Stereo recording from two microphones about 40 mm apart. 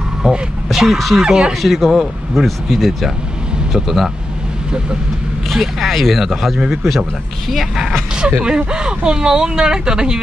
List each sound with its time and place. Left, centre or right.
0.2 s speech: centre
1.2 s speech: right
1.6 s speech: centre
5.5 s a man's voice: centre
8.5 s speech: right